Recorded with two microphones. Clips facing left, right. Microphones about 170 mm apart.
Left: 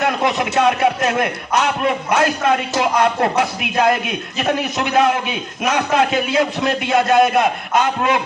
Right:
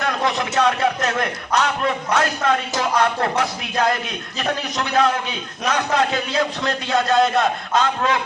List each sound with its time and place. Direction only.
0.0 s a man's voice: 20° left (ahead or behind)